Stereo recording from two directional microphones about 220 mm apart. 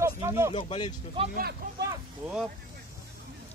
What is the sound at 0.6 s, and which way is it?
Speech, 20° left (ahead or behind).